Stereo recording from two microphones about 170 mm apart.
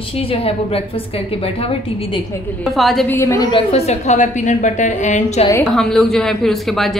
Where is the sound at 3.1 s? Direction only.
15° left (ahead or behind).